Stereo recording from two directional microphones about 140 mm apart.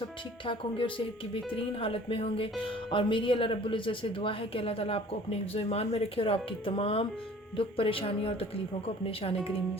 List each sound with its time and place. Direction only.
0.4 s speech: 40° left (ahead or behind)